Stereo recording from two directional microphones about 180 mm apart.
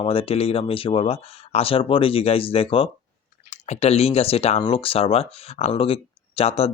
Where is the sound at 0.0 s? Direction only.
30° left (ahead or behind).